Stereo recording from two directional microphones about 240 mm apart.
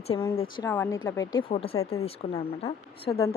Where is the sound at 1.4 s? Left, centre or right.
Left.